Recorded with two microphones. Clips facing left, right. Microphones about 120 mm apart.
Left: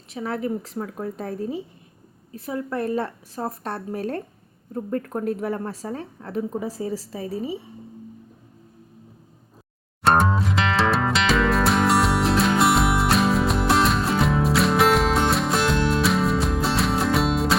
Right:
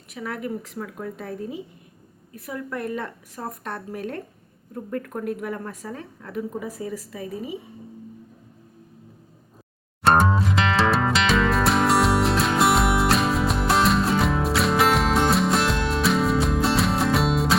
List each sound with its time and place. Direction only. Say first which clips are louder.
0.1 s a woman's voice: left 4 dB; 30° left (ahead or behind)
10.0 s music: even; centre (ahead or behind)